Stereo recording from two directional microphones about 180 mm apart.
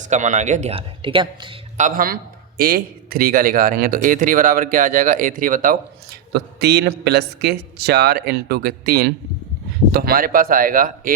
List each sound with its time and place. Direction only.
0.0 s speech: 40° right (ahead or behind)
1.8 s speech: 50° right (ahead or behind)
6.3 s a man's voice: 65° right (ahead or behind)